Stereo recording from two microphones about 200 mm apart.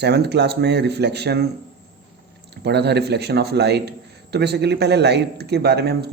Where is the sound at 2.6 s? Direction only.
55° right (ahead or behind).